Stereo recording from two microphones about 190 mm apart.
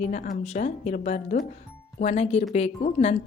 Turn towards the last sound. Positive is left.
turn(degrees=35)  # may be behind; listen again after turning